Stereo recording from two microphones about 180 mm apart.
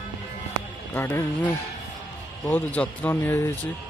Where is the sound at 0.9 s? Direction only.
10° left (ahead or behind).